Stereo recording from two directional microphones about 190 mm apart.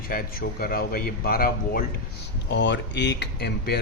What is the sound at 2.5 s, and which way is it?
Speech, 65° left (ahead or behind).